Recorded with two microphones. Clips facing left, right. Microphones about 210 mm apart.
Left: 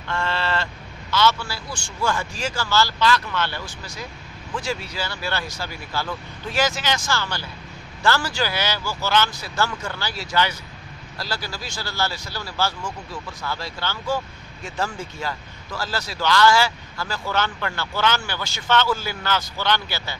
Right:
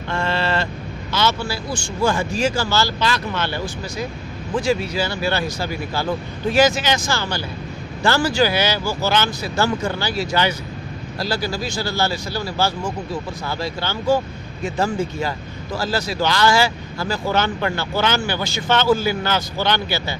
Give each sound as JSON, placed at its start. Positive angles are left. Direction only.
{"t": 0.1, "sound": "vehicle", "side_deg": -15}
{"t": 1.1, "sound": "speech", "side_deg": -15}